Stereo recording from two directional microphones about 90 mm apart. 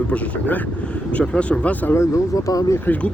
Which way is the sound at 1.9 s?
35° left (ahead or behind).